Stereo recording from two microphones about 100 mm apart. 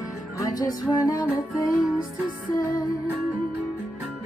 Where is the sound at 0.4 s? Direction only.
40° left (ahead or behind).